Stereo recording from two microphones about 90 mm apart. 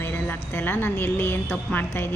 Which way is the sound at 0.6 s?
25° left (ahead or behind).